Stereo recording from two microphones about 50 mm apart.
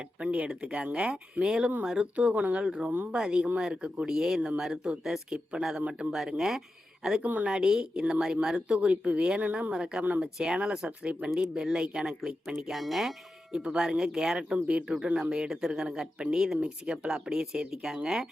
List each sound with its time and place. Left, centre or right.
0.2 s speech: right
2.1 s speech: right
4.1 s speech: centre
7.2 s speech: right
7.4 s speech: centre
8.5 s speech: right; by 13.1 s centre
13.5 s speech: centre
14.5 s speech: right; by 18.3 s centre